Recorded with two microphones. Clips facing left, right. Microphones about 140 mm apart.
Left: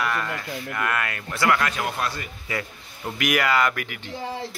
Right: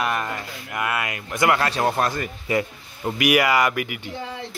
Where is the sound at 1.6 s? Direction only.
35° right (ahead or behind).